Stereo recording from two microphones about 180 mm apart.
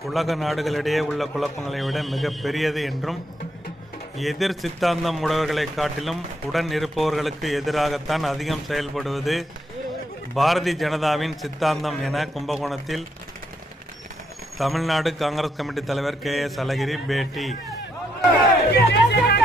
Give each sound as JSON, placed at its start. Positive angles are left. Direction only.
{"t": 0.1, "sound": "a man's voice", "side_deg": 0}
{"t": 4.2, "sound": "a man's voice", "side_deg": 0}
{"t": 14.6, "sound": "a man's voice", "side_deg": 0}
{"t": 18.9, "sound": "chatter", "side_deg": 65}